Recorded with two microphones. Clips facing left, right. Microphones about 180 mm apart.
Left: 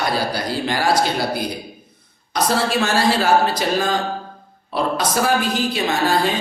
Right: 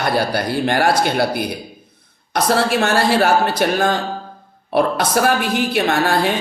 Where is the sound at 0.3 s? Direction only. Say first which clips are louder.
Right 4 dB; 60° right (ahead or behind).